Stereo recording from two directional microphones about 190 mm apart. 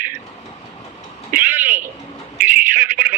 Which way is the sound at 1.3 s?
10° right (ahead or behind).